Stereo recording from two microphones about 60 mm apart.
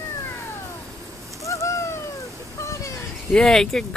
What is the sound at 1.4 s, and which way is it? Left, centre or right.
Bird, left.